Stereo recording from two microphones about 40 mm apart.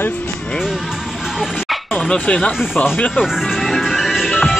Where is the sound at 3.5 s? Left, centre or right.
Centre.